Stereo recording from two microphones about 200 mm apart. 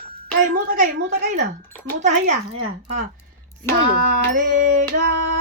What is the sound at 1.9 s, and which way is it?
Music, 35° right (ahead or behind).